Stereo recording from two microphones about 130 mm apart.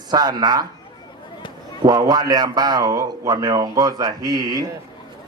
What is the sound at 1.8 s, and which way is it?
A man's voice, 30° right (ahead or behind).